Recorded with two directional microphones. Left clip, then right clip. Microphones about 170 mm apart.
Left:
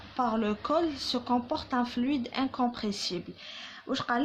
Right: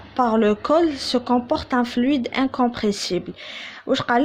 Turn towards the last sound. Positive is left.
turn(degrees=-40)  # may be behind; listen again after turning